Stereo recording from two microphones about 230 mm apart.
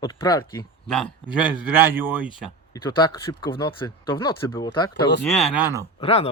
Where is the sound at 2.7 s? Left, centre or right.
Centre.